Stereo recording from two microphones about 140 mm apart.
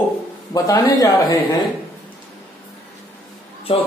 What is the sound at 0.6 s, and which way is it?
Speech, 25° left (ahead or behind).